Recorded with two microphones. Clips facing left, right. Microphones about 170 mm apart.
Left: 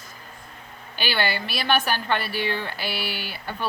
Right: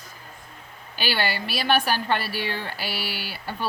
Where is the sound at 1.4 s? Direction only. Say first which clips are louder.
Right 1 dB; 40° right (ahead or behind).